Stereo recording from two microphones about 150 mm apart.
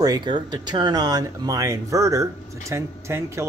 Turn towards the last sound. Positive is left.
turn(degrees=-20)  # may be behind; listen again after turning